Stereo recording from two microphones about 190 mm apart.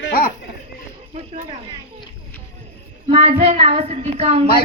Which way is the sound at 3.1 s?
30° right (ahead or behind).